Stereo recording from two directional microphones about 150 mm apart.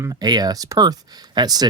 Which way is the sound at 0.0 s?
25° right (ahead or behind).